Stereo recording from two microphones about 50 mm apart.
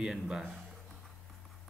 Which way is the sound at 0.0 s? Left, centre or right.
Centre.